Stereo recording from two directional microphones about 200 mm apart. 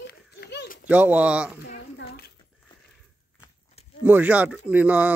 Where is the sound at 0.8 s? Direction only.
5° right (ahead or behind).